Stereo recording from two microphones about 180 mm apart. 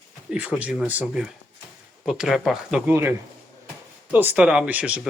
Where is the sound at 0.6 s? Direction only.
5° right (ahead or behind).